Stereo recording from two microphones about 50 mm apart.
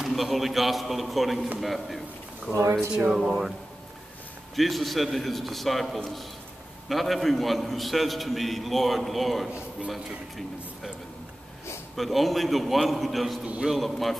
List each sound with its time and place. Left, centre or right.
0.0 s a man's voice: centre
3.1 s speech: centre
4.6 s a man's voice: centre
12.0 s a man's voice: centre
13.4 s speech: centre
13.7 s a man's voice: centre